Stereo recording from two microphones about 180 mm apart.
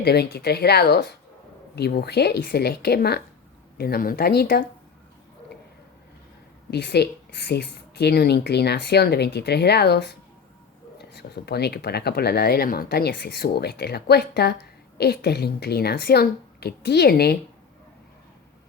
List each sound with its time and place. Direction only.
0.0 s speech: 65° left (ahead or behind)
6.7 s speech: 65° left (ahead or behind)